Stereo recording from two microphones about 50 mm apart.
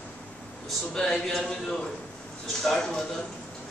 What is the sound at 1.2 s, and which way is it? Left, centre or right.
Speech, centre.